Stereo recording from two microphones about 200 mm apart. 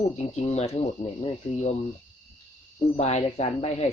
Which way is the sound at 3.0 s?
35° left (ahead or behind).